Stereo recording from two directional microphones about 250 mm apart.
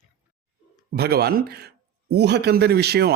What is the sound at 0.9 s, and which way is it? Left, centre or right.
A man's voice, right.